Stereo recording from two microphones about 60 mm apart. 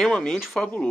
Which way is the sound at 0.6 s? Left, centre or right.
Left.